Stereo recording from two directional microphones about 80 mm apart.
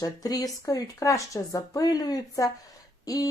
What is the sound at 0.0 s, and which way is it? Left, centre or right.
Speech, left.